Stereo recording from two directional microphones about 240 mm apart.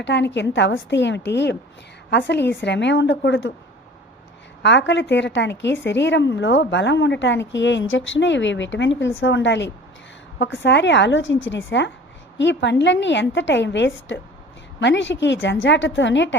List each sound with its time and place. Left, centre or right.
0.0 s a woman's voice: left
4.6 s a woman's voice: left